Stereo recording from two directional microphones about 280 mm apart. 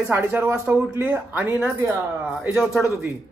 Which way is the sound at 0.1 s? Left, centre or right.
Centre.